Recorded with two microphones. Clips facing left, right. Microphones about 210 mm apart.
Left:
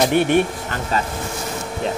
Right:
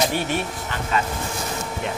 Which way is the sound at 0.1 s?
60° left (ahead or behind).